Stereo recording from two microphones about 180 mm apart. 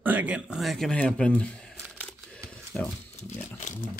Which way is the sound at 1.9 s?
Centre (ahead or behind).